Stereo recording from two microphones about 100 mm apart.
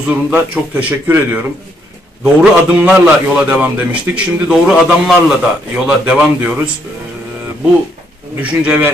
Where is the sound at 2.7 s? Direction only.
15° right (ahead or behind).